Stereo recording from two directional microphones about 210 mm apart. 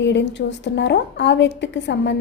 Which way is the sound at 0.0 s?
55° left (ahead or behind).